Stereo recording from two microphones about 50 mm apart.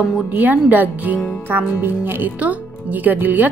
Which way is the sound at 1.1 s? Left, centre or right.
Left.